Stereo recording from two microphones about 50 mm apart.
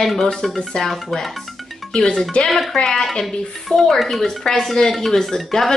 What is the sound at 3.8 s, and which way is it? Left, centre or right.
Speech, centre.